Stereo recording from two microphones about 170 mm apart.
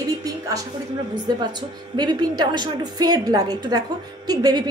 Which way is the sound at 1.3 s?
25° right (ahead or behind).